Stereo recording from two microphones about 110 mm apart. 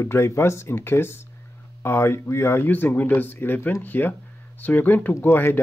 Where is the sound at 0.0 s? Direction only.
25° left (ahead or behind).